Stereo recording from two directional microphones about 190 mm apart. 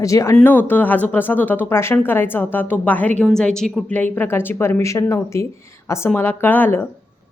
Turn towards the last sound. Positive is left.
turn(degrees=10)  # may be behind; listen again after turning